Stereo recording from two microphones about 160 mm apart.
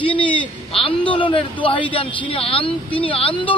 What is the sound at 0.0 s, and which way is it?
A man's voice, 30° left (ahead or behind).